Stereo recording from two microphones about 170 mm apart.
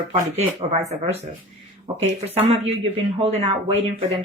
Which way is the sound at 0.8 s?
40° right (ahead or behind).